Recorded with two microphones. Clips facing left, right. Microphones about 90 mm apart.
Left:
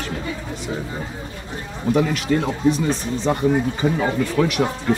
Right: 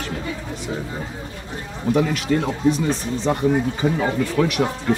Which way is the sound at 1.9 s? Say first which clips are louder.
Even; 20° left (ahead or behind).